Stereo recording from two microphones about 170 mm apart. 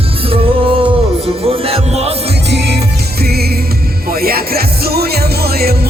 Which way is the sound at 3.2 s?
65° right (ahead or behind).